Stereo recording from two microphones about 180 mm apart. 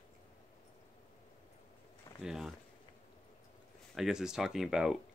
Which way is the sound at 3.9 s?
5° right (ahead or behind).